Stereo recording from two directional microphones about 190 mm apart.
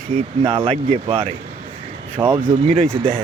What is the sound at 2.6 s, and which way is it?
Speech, 30° right (ahead or behind).